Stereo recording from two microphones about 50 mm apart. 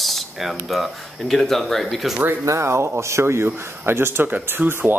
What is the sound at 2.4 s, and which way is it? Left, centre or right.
Speech, right.